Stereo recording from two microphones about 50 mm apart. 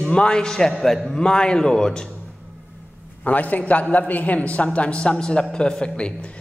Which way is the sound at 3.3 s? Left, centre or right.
Left.